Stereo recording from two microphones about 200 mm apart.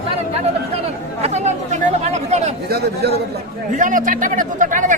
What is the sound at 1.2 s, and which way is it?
Chatter, 35° right (ahead or behind).